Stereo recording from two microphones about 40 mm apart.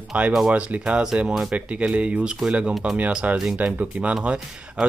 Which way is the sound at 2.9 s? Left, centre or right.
Right.